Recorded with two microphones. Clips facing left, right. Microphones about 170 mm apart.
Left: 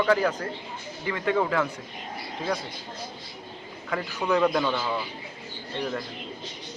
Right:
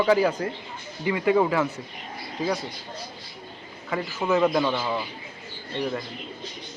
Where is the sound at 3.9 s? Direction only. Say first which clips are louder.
Right 1 dB; centre (ahead or behind).